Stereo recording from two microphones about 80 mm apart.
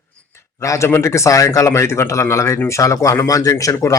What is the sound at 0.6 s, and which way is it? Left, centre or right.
Speech, left.